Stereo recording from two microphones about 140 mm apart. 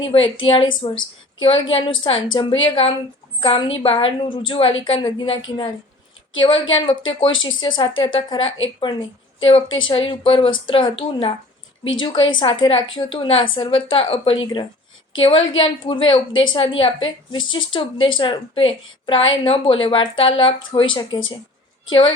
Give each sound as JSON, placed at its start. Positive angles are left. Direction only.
{"t": 0.0, "sound": "a woman's voice", "side_deg": 40}